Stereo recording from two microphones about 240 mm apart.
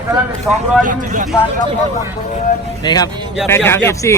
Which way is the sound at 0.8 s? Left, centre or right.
Right.